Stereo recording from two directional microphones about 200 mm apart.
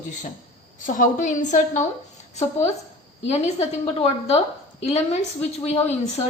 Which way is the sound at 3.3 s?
30° left (ahead or behind).